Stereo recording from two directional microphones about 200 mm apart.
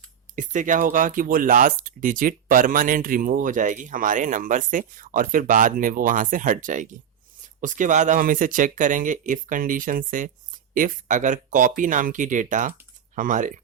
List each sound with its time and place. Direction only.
0.3 s speech: 40° right (ahead or behind)